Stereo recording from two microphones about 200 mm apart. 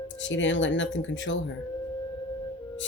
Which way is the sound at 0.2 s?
65° left (ahead or behind).